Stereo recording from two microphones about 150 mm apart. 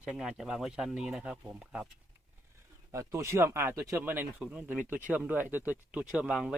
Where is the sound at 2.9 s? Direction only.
20° right (ahead or behind).